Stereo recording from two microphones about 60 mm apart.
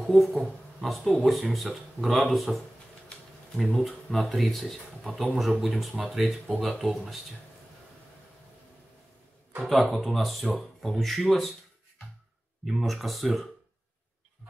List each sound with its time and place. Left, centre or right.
0.0 s a man's voice: centre
9.7 s speech: centre
12.6 s speech: centre